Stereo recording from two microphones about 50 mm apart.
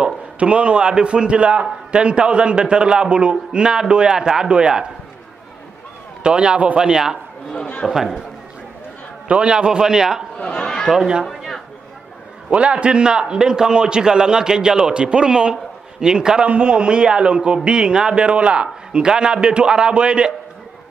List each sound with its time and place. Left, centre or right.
0.0 s a man's voice: right
6.2 s a man's voice: centre
7.5 s speech: centre
7.9 s a man's voice: centre
9.3 s a man's voice: centre
12.4 s a man's voice: right